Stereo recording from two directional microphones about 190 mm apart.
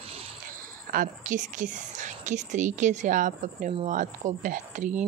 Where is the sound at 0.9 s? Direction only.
45° right (ahead or behind).